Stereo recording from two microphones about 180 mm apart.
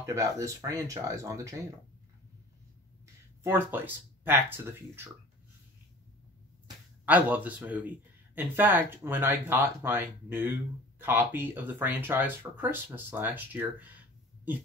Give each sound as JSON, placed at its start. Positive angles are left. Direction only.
{"t": 0.0, "sound": "speech", "side_deg": -15}
{"t": 3.4, "sound": "speech", "side_deg": -10}
{"t": 7.1, "sound": "speech", "side_deg": -10}